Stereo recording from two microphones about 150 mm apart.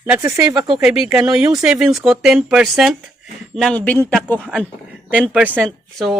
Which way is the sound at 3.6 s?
10° left (ahead or behind).